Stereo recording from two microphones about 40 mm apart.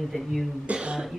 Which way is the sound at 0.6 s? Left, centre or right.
Right.